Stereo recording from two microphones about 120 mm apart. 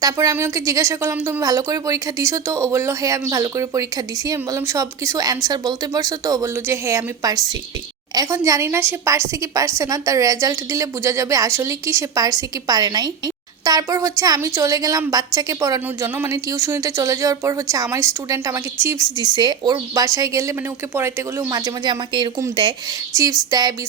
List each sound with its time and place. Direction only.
0.0 s a woman's voice: 25° right (ahead or behind)
1.4 s a woman's voice: 30° right (ahead or behind)
16.0 s a woman's voice: 15° right (ahead or behind)
19.1 s a woman's voice: 35° right (ahead or behind)
23.5 s a woman's voice: 35° right (ahead or behind)